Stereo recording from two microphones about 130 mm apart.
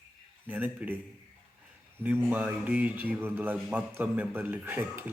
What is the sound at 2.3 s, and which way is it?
Speech, 15° right (ahead or behind).